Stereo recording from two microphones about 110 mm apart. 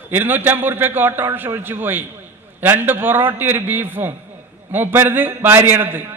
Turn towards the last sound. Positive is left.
turn(degrees=-20)  # may be behind; listen again after turning